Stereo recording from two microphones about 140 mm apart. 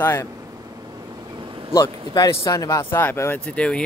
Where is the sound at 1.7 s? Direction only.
25° left (ahead or behind); by 3.8 s 10° left (ahead or behind).